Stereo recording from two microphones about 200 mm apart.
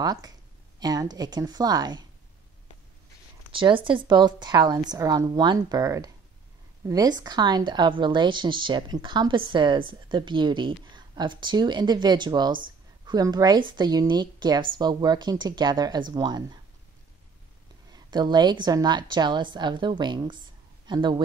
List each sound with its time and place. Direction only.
0.0 s a woman's voice: 20° right (ahead or behind)
3.5 s a woman's voice: 25° right (ahead or behind)
17.9 s a woman's voice: 20° right (ahead or behind)